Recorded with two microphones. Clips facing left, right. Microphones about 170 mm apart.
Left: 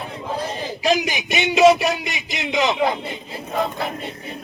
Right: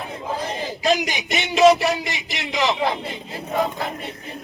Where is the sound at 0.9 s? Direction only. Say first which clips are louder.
Left 1 dB; 15° left (ahead or behind).